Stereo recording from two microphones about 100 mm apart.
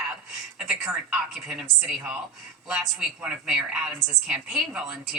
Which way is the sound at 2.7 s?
10° right (ahead or behind).